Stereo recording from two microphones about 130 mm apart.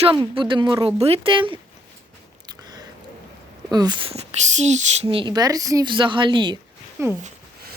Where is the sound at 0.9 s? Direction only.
50° right (ahead or behind).